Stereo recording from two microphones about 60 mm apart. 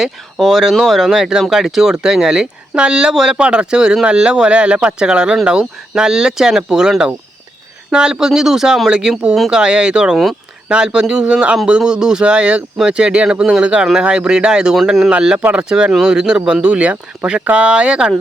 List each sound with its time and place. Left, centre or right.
0.0 s speech: centre
7.9 s speech: centre
15.1 s speech: centre